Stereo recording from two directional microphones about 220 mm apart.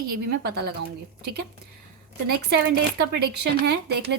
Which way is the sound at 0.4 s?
45° right (ahead or behind).